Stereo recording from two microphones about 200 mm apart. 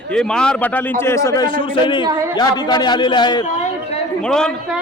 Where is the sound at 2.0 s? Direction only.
20° right (ahead or behind).